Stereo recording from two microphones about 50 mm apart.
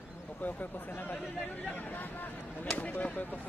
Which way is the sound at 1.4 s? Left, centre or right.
Left.